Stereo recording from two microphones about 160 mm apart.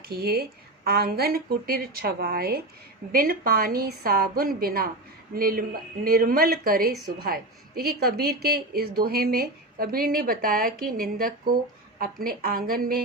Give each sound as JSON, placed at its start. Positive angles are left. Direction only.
{"t": 0.0, "sound": "a woman's voice", "side_deg": -75}